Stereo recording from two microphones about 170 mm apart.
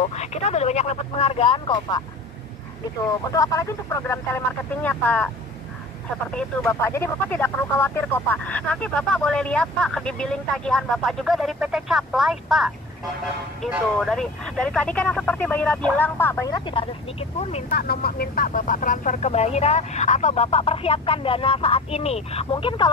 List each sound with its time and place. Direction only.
0.0 s speech: 40° left (ahead or behind)
3.1 s speech: 20° left (ahead or behind)
6.3 s speech: 15° left (ahead or behind); by 17.6 s 40° left (ahead or behind)
17.6 s speech: 65° left (ahead or behind); by 22.8 s 30° left (ahead or behind)